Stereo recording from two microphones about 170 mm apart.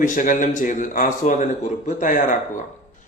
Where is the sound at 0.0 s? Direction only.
50° left (ahead or behind).